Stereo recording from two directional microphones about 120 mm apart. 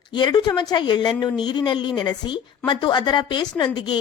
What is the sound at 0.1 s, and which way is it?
A woman's voice, 40° left (ahead or behind).